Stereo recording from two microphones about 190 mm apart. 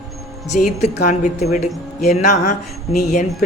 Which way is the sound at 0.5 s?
45° left (ahead or behind).